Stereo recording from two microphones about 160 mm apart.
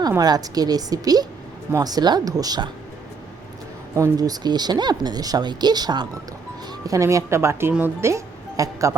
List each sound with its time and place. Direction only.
0.2 s speech: 25° right (ahead or behind)
3.9 s speech: 20° right (ahead or behind)